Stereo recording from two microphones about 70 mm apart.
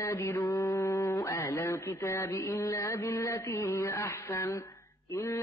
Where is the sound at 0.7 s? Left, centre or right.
Left.